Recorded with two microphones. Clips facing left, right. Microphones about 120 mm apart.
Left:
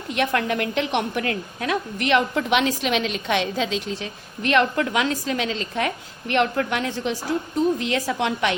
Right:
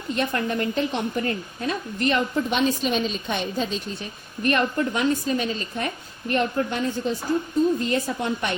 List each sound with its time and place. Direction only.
0.1 s a woman's voice: 75° left (ahead or behind)